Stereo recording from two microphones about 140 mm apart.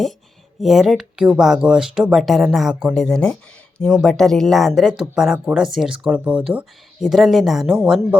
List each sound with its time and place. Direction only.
0.6 s speech: centre (ahead or behind)